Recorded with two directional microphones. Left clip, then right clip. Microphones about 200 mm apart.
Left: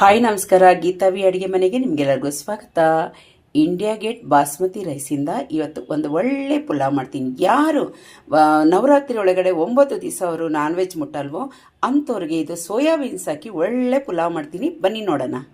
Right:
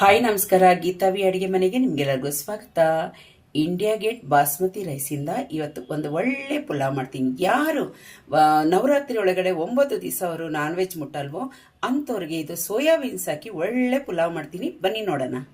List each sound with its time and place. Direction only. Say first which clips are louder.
0.0 s a woman's voice: left 4 dB; 30° left (ahead or behind)